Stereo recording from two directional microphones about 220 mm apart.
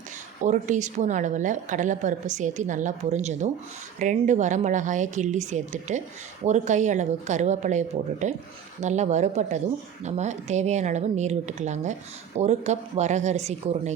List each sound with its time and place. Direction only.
0.4 s a woman's voice: 35° right (ahead or behind)